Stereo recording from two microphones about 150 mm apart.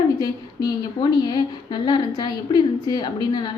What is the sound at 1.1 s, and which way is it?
A woman's voice, 30° left (ahead or behind).